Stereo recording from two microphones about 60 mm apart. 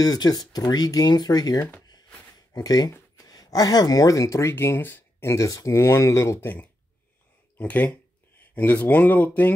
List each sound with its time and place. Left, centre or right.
0.0 s speech: left
5.2 s speech: left
5.7 s speech: left
6.4 s speech: left